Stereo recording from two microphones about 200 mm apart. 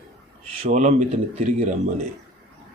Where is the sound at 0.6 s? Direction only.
35° right (ahead or behind).